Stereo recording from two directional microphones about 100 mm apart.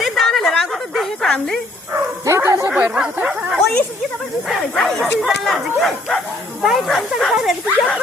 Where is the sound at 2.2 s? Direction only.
30° right (ahead or behind).